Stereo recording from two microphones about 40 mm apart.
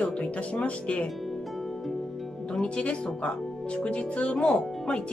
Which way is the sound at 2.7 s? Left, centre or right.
Left.